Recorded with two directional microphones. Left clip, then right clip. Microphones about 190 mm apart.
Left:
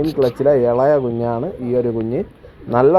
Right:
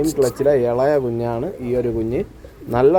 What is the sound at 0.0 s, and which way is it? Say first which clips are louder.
Speech: left 1 dB; 20° right (ahead or behind).